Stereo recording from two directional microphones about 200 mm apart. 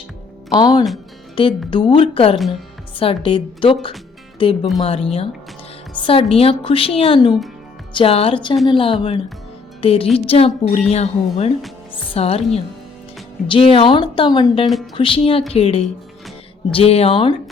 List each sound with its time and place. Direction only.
0.5 s a woman's voice: 20° left (ahead or behind)
13.5 s a woman's voice: 25° left (ahead or behind)